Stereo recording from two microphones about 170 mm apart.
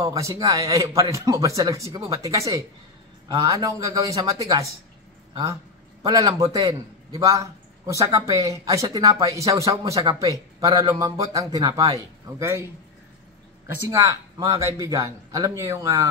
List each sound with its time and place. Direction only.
0.0 s a man's voice: 20° right (ahead or behind)
13.8 s a man's voice: 20° right (ahead or behind)